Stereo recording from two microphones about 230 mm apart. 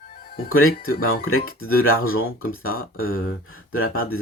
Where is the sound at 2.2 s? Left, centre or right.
Left.